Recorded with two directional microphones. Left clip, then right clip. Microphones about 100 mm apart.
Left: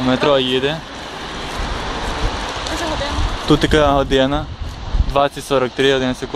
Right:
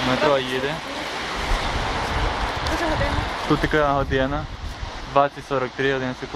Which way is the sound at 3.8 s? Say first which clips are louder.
Left 6 dB; 20° left (ahead or behind).